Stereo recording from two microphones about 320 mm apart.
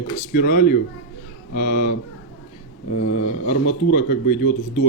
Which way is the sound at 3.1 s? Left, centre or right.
Left.